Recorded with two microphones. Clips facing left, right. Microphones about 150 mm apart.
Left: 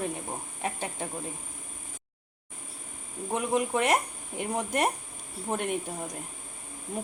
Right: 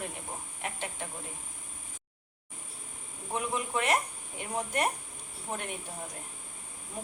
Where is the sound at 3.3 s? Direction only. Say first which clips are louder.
Left 5 dB; 40° left (ahead or behind).